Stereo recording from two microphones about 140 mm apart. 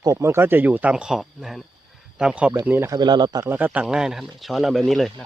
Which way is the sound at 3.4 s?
10° right (ahead or behind).